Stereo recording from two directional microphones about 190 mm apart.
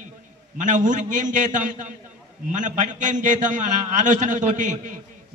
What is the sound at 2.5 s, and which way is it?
A man's voice, 40° right (ahead or behind).